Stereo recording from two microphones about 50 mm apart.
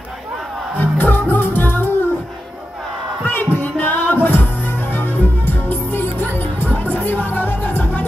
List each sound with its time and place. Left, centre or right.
0.7 s music: left
3.3 s music: left